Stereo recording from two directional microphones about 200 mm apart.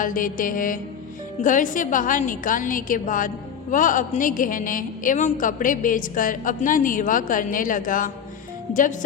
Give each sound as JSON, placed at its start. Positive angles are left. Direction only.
{"t": 0.0, "sound": "mantra", "side_deg": 45}
{"t": 1.4, "sound": "a woman's voice", "side_deg": 40}